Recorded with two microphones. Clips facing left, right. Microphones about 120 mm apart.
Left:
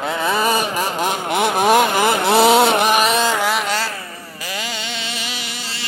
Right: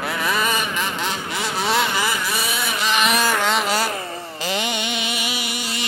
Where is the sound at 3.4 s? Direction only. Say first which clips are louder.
Left 1 dB; centre (ahead or behind).